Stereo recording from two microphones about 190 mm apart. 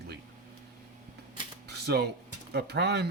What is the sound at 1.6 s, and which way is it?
Camera, 60° right (ahead or behind).